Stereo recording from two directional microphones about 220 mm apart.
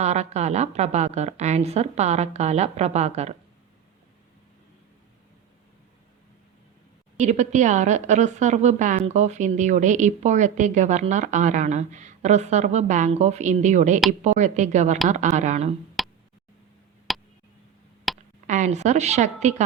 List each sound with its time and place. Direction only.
0.0 s a woman's voice: 30° right (ahead or behind)
7.2 s a woman's voice: 30° right (ahead or behind)
16.0 s tick: centre (ahead or behind)
17.1 s a sound: centre (ahead or behind)
18.4 s a woman's voice: 35° right (ahead or behind)